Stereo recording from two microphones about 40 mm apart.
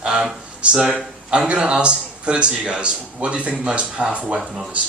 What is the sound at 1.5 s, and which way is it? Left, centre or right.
Speech, right.